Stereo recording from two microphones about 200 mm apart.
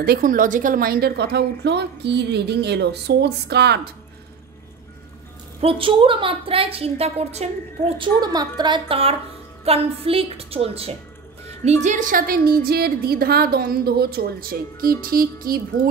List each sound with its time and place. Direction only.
0.0 s a woman's voice: 45° right (ahead or behind)
5.6 s a woman's voice: 30° right (ahead or behind)
8.0 s a woman's voice: 20° right (ahead or behind); by 15.9 s 45° right (ahead or behind)